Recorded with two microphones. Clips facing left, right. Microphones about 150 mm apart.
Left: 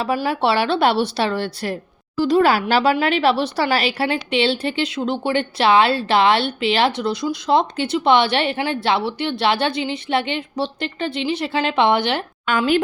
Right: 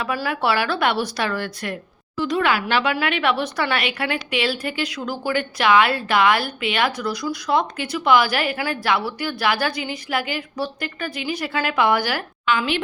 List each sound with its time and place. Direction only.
0.3 s speech: 30° left (ahead or behind)
12.5 s a woman's voice: 45° left (ahead or behind)